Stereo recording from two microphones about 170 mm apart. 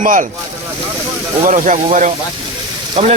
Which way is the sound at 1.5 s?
50° right (ahead or behind).